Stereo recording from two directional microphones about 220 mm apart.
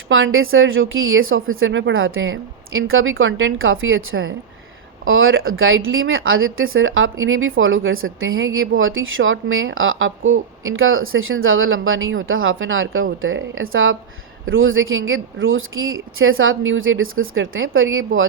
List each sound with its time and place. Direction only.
0.1 s speech: 65° right (ahead or behind)